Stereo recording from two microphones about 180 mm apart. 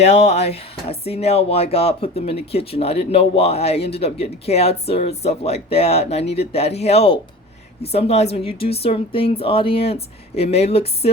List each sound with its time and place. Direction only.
0.0 s speech: 35° left (ahead or behind)